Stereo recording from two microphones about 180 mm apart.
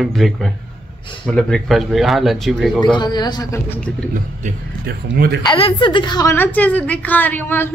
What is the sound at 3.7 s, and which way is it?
Speech, 5° left (ahead or behind).